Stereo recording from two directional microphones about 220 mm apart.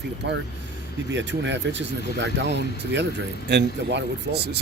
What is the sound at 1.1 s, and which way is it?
Speech, 55° right (ahead or behind).